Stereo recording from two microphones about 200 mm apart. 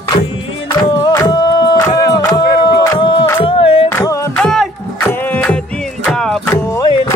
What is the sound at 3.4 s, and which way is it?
Music, 25° left (ahead or behind).